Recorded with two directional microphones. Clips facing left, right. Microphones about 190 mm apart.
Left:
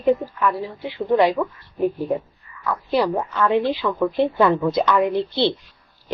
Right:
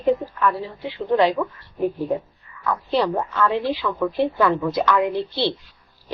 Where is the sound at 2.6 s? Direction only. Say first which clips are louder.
Left 1 dB; 10° left (ahead or behind).